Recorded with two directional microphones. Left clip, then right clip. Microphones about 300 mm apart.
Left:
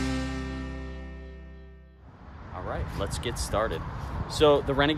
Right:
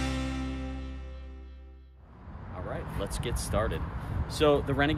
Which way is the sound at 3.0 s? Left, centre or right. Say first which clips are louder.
Left 3 dB; centre.